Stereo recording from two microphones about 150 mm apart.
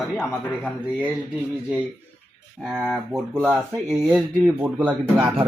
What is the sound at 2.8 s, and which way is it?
Speech, 5° left (ahead or behind).